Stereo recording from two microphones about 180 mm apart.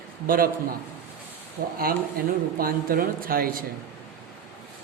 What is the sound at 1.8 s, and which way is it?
Speech, 55° right (ahead or behind).